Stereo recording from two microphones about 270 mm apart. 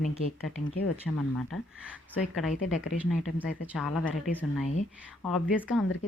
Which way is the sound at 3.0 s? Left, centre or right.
Centre.